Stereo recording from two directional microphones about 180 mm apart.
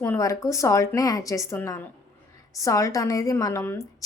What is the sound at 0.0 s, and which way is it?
Speech, 15° left (ahead or behind).